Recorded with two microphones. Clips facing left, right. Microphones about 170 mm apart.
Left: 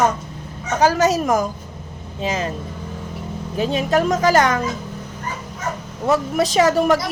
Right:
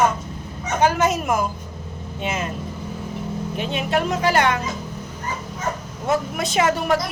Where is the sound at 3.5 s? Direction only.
35° left (ahead or behind).